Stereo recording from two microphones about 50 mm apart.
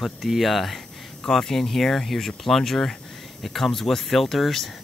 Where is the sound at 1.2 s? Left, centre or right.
Centre.